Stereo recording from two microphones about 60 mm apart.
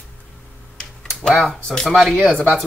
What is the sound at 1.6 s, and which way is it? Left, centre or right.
Speech, centre.